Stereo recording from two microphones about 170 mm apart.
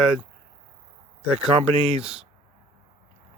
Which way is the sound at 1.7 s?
35° right (ahead or behind).